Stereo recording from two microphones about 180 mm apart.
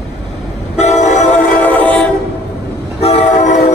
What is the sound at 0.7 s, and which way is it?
Train, 40° left (ahead or behind).